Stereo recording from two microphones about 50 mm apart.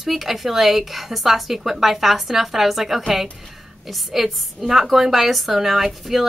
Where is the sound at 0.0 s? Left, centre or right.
Centre.